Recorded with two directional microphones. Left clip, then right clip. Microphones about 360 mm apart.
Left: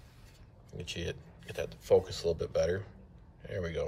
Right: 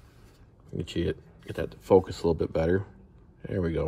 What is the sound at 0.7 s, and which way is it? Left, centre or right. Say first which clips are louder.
Speech: right 8 dB; centre.